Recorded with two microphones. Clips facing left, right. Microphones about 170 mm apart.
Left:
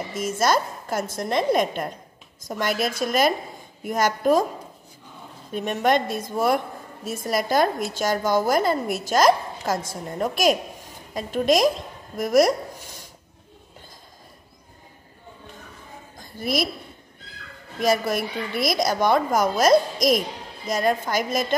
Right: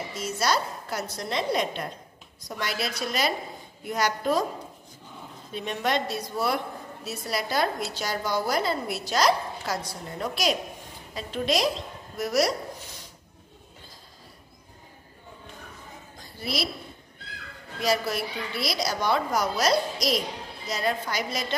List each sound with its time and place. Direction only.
0.1 s a woman's voice: 50° left (ahead or behind)
5.5 s a woman's voice: 50° left (ahead or behind)
16.2 s a sound: 50° left (ahead or behind)
17.8 s a woman's voice: 50° left (ahead or behind)